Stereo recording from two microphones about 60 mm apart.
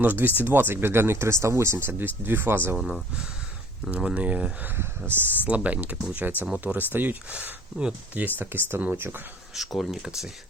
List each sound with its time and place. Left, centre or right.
0.0 s speech: right
2.7 s speech: centre
3.9 s speech: right
4.8 s speech: right
5.5 s speech: right
8.4 s speech: right
9.6 s speech: centre